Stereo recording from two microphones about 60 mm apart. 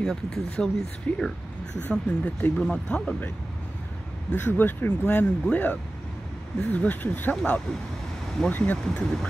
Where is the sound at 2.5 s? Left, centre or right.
Centre.